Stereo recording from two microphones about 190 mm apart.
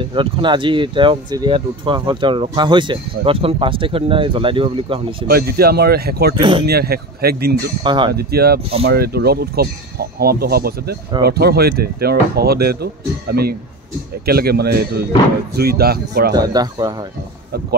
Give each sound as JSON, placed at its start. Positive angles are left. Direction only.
{"t": 0.0, "sound": "speech", "side_deg": -25}
{"t": 5.3, "sound": "speech", "side_deg": -55}
{"t": 7.8, "sound": "speech", "side_deg": -25}
{"t": 8.1, "sound": "speech", "side_deg": -55}
{"t": 16.3, "sound": "speech", "side_deg": -20}